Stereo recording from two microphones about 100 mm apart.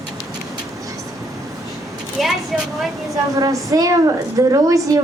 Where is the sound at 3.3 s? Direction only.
35° right (ahead or behind).